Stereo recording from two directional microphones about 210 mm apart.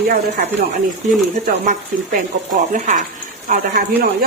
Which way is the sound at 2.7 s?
35° right (ahead or behind).